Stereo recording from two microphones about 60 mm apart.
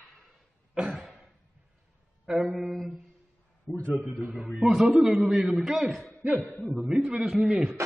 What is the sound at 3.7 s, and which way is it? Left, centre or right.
Speech, centre.